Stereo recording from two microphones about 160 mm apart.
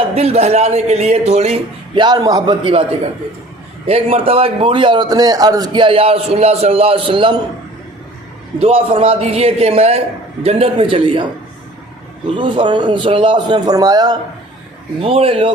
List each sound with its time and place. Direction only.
0.1 s speech: 40° right (ahead or behind)
2.0 s a man's voice: 25° right (ahead or behind)
3.8 s a man's voice: 35° right (ahead or behind)
8.5 s a man's voice: 35° right (ahead or behind)
12.4 s a man's voice: 30° right (ahead or behind)
15.0 s a man's voice: 35° right (ahead or behind)